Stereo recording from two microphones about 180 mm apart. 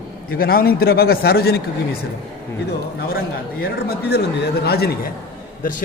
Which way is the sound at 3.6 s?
60° left (ahead or behind).